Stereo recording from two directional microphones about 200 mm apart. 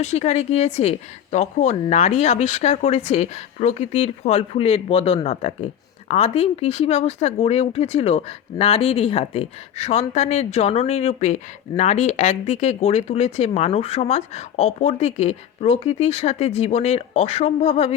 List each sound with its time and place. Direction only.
0.0 s speech: 35° left (ahead or behind)